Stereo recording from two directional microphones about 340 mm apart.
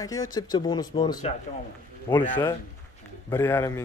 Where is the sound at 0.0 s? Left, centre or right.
Centre.